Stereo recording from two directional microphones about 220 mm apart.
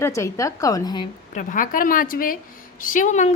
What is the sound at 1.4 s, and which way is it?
A woman's voice, 35° left (ahead or behind).